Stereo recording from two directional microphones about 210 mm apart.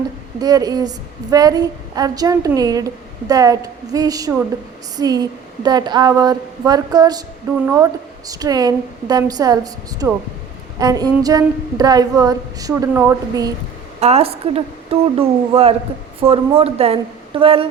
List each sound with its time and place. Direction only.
0.3 s a woman's voice: 20° right (ahead or behind)
14.0 s speech: 30° right (ahead or behind)